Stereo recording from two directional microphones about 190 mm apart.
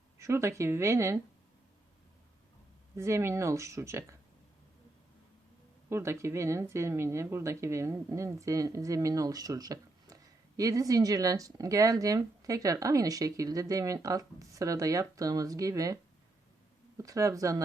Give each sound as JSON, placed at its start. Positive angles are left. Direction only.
{"t": 0.2, "sound": "speech", "side_deg": -15}
{"t": 2.9, "sound": "speech", "side_deg": -15}
{"t": 5.9, "sound": "speech", "side_deg": -15}
{"t": 17.0, "sound": "speech", "side_deg": -15}